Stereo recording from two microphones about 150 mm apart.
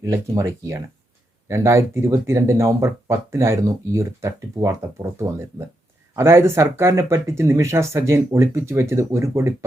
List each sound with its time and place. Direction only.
0.0 s speech: 20° right (ahead or behind)